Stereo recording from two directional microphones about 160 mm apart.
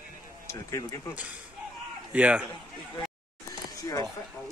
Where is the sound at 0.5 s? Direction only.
20° left (ahead or behind).